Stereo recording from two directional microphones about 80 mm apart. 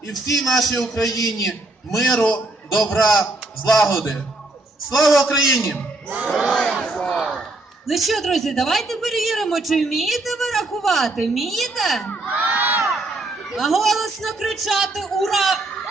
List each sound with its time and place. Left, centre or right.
0.3 s a woman's voice: centre
1.1 s a man's voice: left
2.0 s a man's voice: centre
6.1 s battle cry: right
6.5 s a sound: centre
7.9 s a woman's voice: centre
12.3 s crowd: right
13.5 s a woman's voice: centre